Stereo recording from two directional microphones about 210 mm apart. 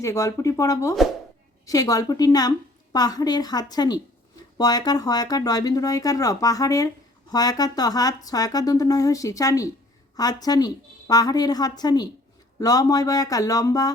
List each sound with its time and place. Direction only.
0.0 s a woman's voice: 15° left (ahead or behind)